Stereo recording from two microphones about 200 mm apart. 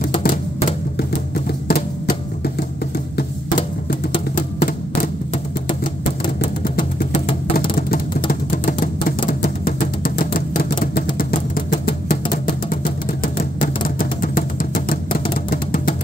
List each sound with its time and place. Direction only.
0.9 s music: 50° left (ahead or behind)
4.4 s music: 45° left (ahead or behind)
6.6 s music: 45° left (ahead or behind)
7.2 s music: 30° left (ahead or behind)
7.7 s a sound: 45° left (ahead or behind)
13.2 s music: 45° left (ahead or behind)